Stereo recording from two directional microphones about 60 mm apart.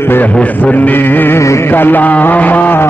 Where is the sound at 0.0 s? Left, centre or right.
Left.